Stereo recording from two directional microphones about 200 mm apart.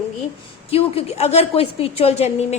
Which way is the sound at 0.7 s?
30° left (ahead or behind).